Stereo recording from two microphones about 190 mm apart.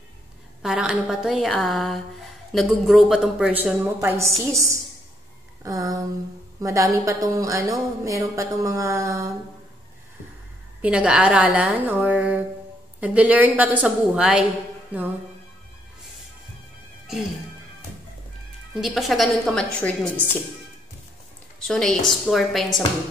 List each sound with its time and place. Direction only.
0.6 s a woman's voice: 5° right (ahead or behind)
5.6 s a sound: 20° right (ahead or behind)
6.6 s a woman's voice: 15° right (ahead or behind)
10.8 s a woman's voice: 5° right (ahead or behind)
18.8 s a woman's voice: centre (ahead or behind)
21.5 s a woman's voice: 5° left (ahead or behind)